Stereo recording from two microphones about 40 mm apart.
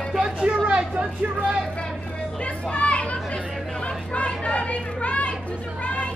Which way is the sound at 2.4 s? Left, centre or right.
Left.